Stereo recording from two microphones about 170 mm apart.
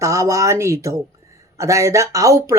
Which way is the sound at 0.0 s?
20° right (ahead or behind).